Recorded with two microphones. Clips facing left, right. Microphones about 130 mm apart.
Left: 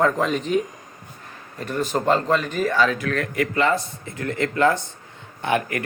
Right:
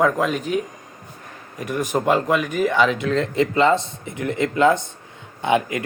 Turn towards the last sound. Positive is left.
turn(degrees=-15)  # may be behind; listen again after turning